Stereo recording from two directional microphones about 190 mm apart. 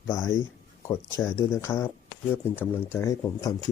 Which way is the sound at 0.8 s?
10° left (ahead or behind).